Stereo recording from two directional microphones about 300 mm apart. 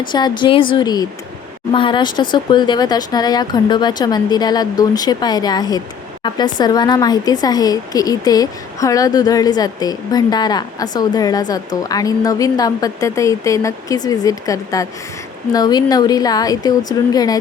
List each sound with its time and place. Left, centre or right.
0.0 s a woman's voice: centre